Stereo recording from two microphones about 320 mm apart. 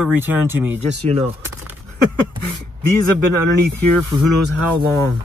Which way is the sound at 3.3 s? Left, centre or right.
Right.